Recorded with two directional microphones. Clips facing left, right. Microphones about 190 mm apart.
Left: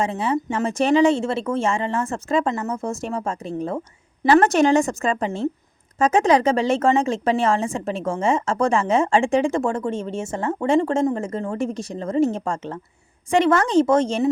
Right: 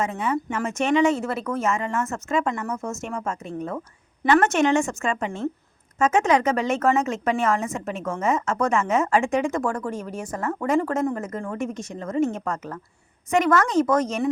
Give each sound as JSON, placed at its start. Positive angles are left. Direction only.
{"t": 0.0, "sound": "a woman's voice", "side_deg": 30}